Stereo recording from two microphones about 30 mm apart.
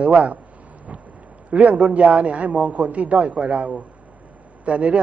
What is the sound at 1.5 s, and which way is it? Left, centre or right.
A man's voice, right.